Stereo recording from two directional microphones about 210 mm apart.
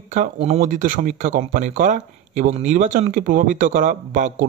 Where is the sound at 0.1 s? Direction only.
30° right (ahead or behind).